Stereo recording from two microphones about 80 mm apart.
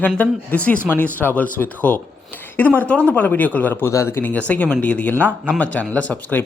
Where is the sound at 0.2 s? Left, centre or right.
Centre.